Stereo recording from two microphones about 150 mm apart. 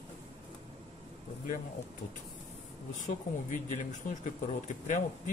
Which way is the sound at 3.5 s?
60° left (ahead or behind).